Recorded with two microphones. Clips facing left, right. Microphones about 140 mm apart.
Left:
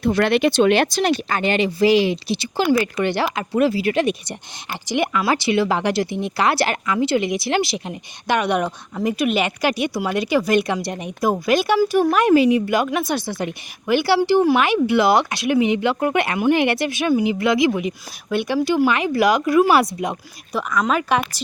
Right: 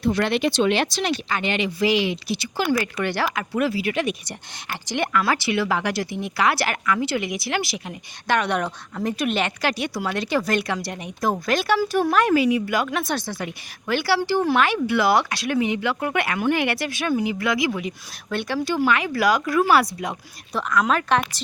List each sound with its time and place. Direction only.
0.0 s speech: 60° left (ahead or behind); by 5.2 s 15° left (ahead or behind)
5.2 s speech: 25° left (ahead or behind)
8.3 s speech: 15° left (ahead or behind)
9.0 s speech: 5° left (ahead or behind); by 12.9 s 25° left (ahead or behind)
12.9 s speech: 5° left (ahead or behind)
13.4 s speech: 20° left (ahead or behind)
20.5 s speech: 5° left (ahead or behind)